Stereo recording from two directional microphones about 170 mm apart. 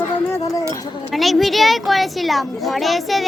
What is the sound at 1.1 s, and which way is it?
Speech, centre (ahead or behind).